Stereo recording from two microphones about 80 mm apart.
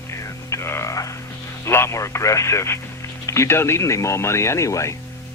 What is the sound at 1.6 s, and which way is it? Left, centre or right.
Speech, left.